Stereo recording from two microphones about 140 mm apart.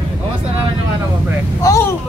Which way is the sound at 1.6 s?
25° left (ahead or behind).